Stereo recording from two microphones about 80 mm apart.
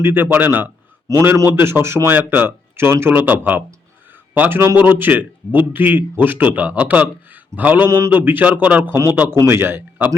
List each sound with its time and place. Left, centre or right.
0.0 s speech: right
1.1 s a man's voice: right
1.5 s speech: right
7.9 s a man's voice: right
8.1 s speech: right